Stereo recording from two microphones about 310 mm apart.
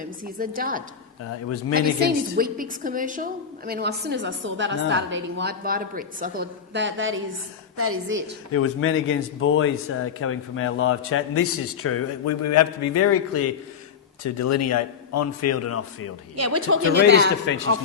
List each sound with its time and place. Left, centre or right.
0.3 s a woman's voice: right
8.5 s a man's voice: left
16.3 s speech: right
17.1 s a woman's voice: right